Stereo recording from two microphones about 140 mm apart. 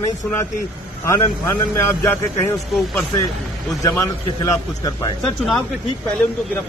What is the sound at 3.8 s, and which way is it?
Speech, 25° left (ahead or behind).